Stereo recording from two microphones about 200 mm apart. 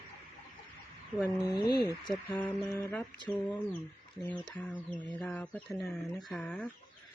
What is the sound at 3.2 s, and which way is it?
Speech, 10° left (ahead or behind).